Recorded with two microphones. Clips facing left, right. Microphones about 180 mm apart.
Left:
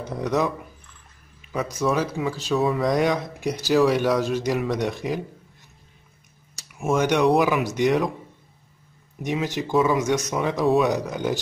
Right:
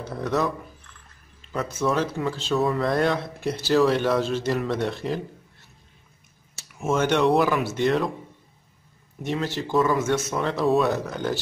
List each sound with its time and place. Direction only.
0.2 s speech: 15° left (ahead or behind)
1.7 s speech: 10° left (ahead or behind)
7.0 s speech: 10° left (ahead or behind)
9.2 s speech: 15° left (ahead or behind)